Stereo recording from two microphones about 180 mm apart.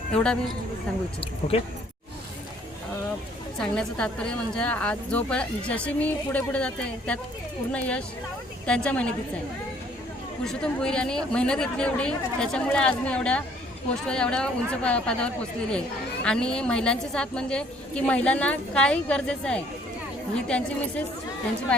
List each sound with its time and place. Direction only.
0.1 s a woman's voice: 5° left (ahead or behind)
1.4 s speech: 35° left (ahead or behind)
3.6 s a woman's voice: 5° left (ahead or behind)
10.4 s a woman's voice: 5° left (ahead or behind)